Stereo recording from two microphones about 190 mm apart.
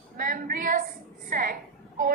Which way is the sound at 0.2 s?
45° right (ahead or behind).